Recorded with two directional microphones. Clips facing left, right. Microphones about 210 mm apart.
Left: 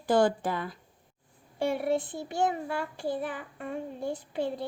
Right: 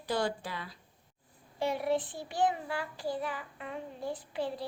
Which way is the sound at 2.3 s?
50° left (ahead or behind).